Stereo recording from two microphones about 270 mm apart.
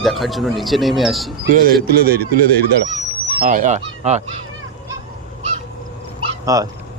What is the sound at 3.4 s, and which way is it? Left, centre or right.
Goose, right.